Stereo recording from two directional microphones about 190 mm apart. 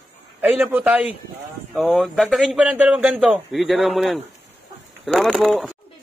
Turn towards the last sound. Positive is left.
turn(degrees=0)  # may be behind; listen again after turning